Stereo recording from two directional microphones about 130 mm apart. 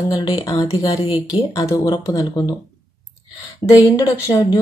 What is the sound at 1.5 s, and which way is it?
Speech, 30° left (ahead or behind).